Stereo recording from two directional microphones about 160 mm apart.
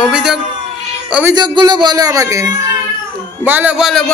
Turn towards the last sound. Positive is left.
turn(degrees=-10)  # may be behind; listen again after turning